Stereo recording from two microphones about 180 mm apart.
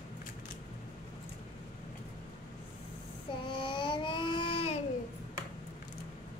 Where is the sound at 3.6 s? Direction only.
25° left (ahead or behind).